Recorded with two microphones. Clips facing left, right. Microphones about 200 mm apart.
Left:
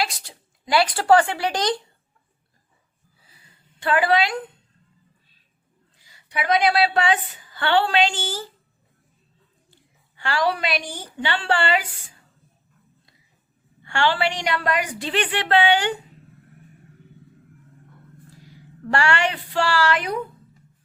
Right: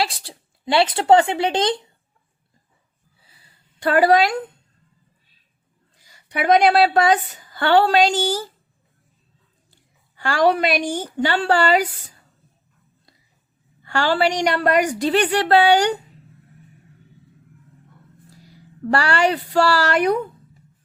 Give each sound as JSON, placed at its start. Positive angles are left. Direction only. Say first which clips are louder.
{"t": 0.0, "sound": "speech", "louder": "right 3 dB", "side_deg": -30}
{"t": 3.2, "sound": "a sound", "louder": "left 2 dB", "side_deg": -30}
{"t": 6.0, "sound": "a woman's voice", "louder": "right 4 dB", "side_deg": -45}
{"t": 10.2, "sound": "a woman's voice", "louder": "right 6 dB", "side_deg": -45}
{"t": 13.8, "sound": "a woman's voice", "louder": "right 3 dB", "side_deg": -40}
{"t": 18.4, "sound": "a woman's voice", "louder": "right 7 dB", "side_deg": -40}